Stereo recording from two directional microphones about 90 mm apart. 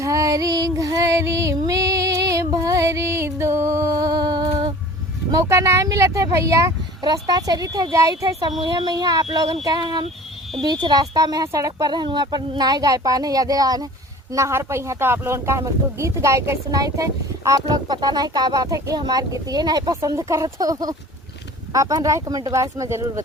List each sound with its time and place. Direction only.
0.0 s female singing: 40° right (ahead or behind)
5.3 s speech: 35° right (ahead or behind)
7.0 s speech: 45° right (ahead or behind)
8.6 s speech: 50° right (ahead or behind)
9.8 s speech: 65° right (ahead or behind); by 11.9 s 40° right (ahead or behind)
11.9 s speech: 55° right (ahead or behind); by 17.7 s 35° right (ahead or behind)
17.8 s speech: 50° right (ahead or behind)